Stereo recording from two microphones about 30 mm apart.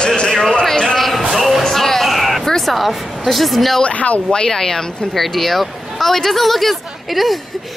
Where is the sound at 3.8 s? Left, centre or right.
Left.